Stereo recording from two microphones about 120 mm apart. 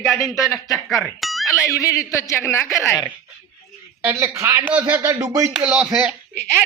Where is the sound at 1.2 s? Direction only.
Centre (ahead or behind).